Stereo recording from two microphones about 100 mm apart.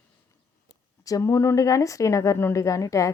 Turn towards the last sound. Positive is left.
turn(degrees=30)  # may be behind; listen again after turning